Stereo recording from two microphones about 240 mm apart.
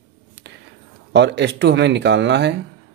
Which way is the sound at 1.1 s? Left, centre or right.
Right.